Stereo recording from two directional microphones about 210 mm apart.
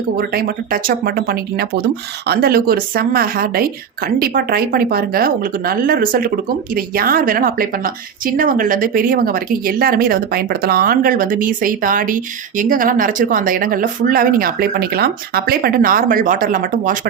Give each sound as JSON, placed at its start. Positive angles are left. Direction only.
{"t": 0.2, "sound": "a woman's voice", "side_deg": -45}